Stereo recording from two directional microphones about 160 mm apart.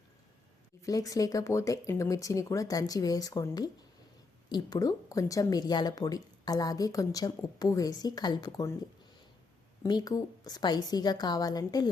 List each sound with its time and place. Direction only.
0.8 s speech: 20° left (ahead or behind)
9.8 s speech: 25° left (ahead or behind)